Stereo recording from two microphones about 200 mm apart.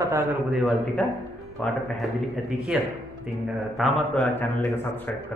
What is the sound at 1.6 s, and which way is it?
Speech, 5° left (ahead or behind).